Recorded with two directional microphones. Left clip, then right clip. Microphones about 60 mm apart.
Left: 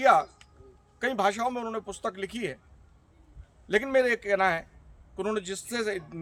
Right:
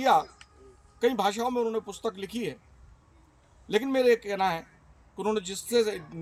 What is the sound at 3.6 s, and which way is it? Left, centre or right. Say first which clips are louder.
A man's voice: right 1 dB; left.